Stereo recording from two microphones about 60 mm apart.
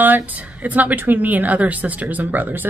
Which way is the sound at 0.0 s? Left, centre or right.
Right.